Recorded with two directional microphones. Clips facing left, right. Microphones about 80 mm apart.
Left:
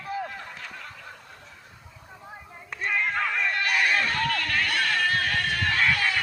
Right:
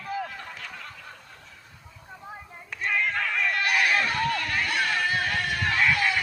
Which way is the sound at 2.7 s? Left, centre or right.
Centre.